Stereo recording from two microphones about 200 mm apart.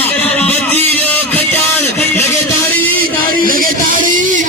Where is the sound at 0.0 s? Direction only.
10° left (ahead or behind).